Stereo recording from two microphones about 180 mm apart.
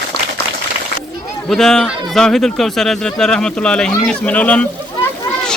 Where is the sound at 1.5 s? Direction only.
Centre (ahead or behind).